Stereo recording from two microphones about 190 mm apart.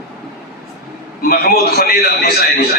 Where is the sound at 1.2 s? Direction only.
50° left (ahead or behind).